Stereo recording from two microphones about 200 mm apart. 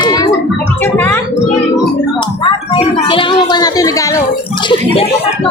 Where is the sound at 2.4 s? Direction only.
25° left (ahead or behind).